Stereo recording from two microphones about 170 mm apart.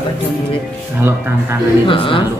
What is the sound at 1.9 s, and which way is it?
Speech, 30° left (ahead or behind).